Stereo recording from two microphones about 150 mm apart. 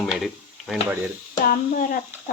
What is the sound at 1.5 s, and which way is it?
Speech, 80° left.